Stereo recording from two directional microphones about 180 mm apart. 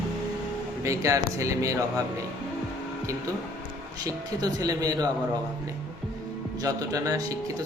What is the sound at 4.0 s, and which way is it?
A man's voice, 20° right (ahead or behind).